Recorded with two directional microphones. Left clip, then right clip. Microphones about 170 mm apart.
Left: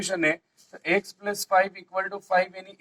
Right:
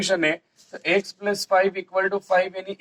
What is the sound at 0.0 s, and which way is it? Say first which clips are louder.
Speech: right 3 dB; 15° right (ahead or behind).